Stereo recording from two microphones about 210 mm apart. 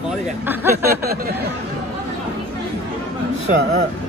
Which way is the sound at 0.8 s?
45° right (ahead or behind).